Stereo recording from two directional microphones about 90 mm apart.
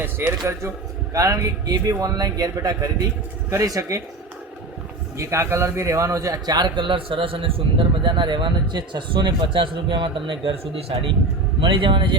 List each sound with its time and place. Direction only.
0.0 s a man's voice: 25° right (ahead or behind)
5.1 s a man's voice: 35° right (ahead or behind); by 11.1 s 90° right
11.6 s speech: 70° right (ahead or behind)